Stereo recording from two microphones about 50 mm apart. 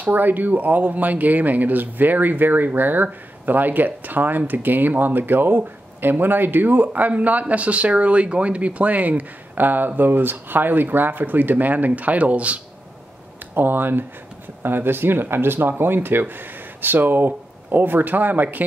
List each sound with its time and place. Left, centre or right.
0.0 s speech: right
13.6 s speech: right